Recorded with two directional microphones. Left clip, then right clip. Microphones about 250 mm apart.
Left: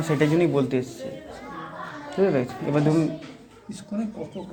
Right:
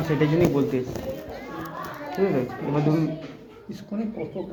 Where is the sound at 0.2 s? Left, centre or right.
Left.